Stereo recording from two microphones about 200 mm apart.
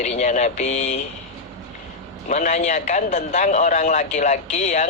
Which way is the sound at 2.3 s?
40° left (ahead or behind).